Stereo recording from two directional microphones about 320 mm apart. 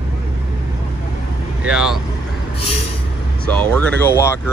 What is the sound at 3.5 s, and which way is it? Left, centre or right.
Speech, centre.